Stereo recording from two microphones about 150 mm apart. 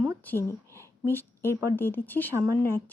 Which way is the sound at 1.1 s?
15° left (ahead or behind).